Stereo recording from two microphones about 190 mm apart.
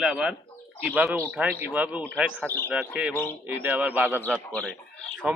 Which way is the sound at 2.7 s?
5° right (ahead or behind).